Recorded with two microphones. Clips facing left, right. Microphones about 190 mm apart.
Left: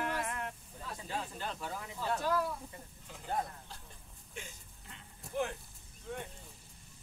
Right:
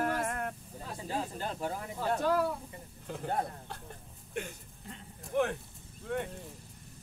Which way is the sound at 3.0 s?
60° right (ahead or behind).